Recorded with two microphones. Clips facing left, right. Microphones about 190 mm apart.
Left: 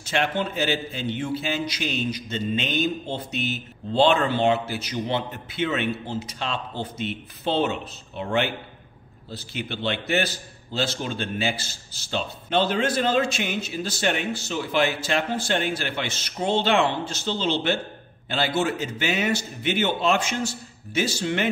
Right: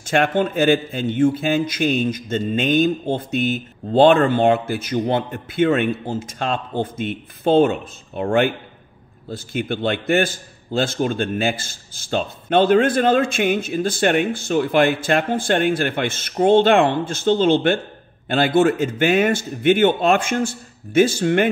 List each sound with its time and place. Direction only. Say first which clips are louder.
0.0 s a man's voice: right 7 dB; 50° right (ahead or behind)